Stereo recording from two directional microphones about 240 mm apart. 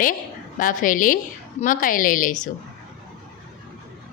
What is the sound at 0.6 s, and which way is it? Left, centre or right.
A woman's voice, left.